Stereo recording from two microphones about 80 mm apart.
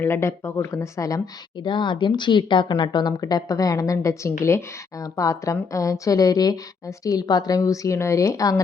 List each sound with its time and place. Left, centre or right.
0.0 s speech: left
1.5 s speech: left